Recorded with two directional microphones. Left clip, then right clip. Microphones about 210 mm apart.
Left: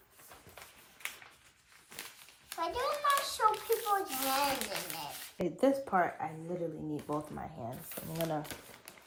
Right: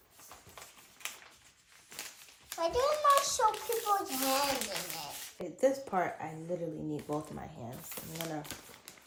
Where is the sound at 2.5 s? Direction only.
10° right (ahead or behind).